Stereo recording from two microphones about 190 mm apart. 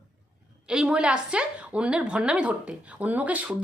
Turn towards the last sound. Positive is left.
turn(degrees=-10)  # may be behind; listen again after turning